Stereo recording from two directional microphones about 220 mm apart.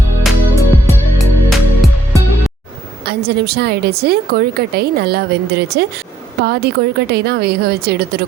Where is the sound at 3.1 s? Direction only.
45° right (ahead or behind).